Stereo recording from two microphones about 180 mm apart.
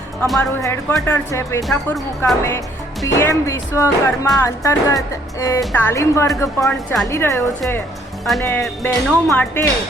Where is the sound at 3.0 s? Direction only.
15° left (ahead or behind).